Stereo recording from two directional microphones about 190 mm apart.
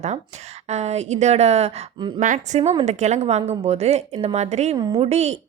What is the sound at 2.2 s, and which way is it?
A woman's voice, 40° right (ahead or behind).